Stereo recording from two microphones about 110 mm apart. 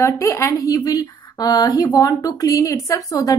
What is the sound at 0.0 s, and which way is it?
Speech, 25° left (ahead or behind).